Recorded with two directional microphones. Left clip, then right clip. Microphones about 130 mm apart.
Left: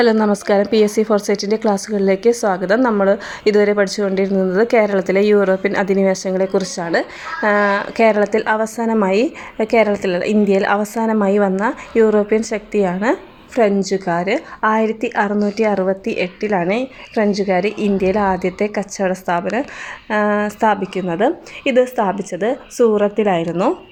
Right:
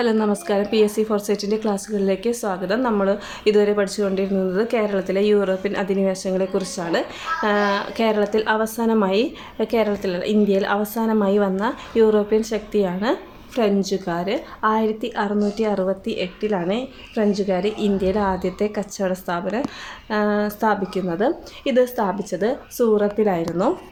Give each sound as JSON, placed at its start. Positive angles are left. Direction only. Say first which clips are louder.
{"t": 0.0, "sound": "a woman's voice", "louder": "left 6 dB", "side_deg": 45}
{"t": 9.7, "sound": "a woman's voice", "louder": "left 7 dB", "side_deg": 45}